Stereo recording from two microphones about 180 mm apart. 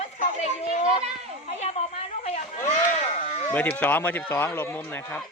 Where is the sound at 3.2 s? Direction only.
35° left (ahead or behind).